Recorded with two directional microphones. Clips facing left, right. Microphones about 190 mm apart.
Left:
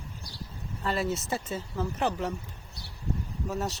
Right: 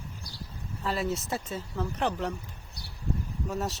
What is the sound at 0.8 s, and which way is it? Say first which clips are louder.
Speech: left 1 dB; centre (ahead or behind).